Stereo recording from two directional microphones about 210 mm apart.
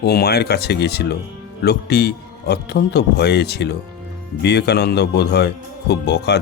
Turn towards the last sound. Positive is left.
turn(degrees=55)  # may be behind; listen again after turning